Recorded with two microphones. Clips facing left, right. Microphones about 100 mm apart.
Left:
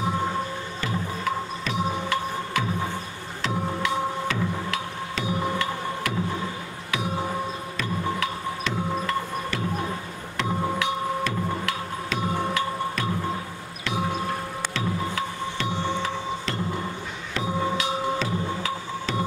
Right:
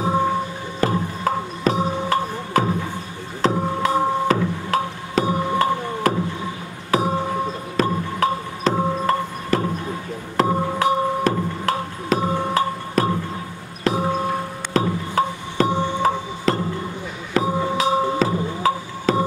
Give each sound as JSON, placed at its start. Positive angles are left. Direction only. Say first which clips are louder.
{"t": 0.7, "sound": "music", "louder": "right 10 dB", "side_deg": -45}
{"t": 6.9, "sound": "a sound", "louder": "right 9 dB", "side_deg": -40}
{"t": 7.7, "sound": "music", "louder": "right 7 dB", "side_deg": -40}
{"t": 14.7, "sound": "music", "louder": "right 9 dB", "side_deg": -40}